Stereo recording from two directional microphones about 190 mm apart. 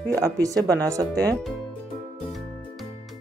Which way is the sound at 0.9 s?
15° right (ahead or behind).